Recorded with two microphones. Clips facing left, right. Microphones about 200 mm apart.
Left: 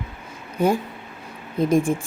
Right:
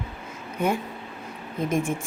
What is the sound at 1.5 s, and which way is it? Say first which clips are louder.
Speech: left 6 dB; 35° left (ahead or behind).